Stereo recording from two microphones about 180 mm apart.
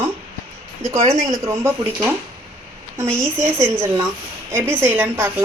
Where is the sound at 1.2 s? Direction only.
15° right (ahead or behind).